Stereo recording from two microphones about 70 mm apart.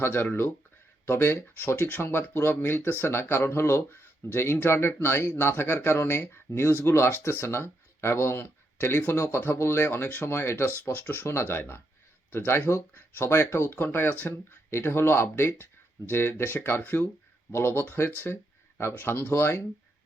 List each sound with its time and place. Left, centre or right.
0.0 s speech: left